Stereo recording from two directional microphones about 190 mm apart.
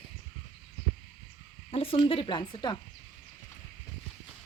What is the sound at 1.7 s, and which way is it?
Speech, 30° left (ahead or behind).